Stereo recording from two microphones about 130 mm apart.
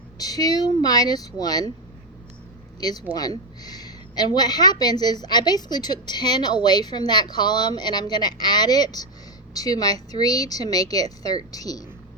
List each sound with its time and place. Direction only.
0.2 s a woman's voice: 30° left (ahead or behind)
2.8 s a woman's voice: 30° left (ahead or behind)